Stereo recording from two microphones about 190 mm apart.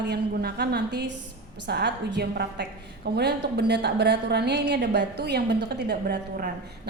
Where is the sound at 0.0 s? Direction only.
60° right (ahead or behind).